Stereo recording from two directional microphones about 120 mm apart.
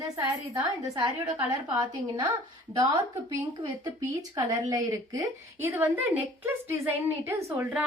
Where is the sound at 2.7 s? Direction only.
35° right (ahead or behind).